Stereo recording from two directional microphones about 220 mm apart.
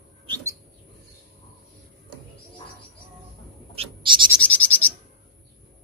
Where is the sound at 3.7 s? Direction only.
25° right (ahead or behind).